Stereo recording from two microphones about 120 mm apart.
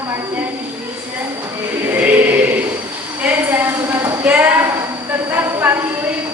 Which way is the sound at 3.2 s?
15° right (ahead or behind).